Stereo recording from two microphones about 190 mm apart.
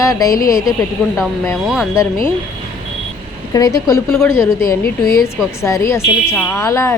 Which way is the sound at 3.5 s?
20° left (ahead or behind).